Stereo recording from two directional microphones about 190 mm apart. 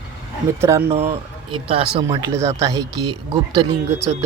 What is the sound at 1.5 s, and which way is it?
Speech, 30° right (ahead or behind).